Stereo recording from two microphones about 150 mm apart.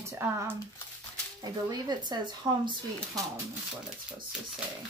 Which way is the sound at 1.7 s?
30° right (ahead or behind).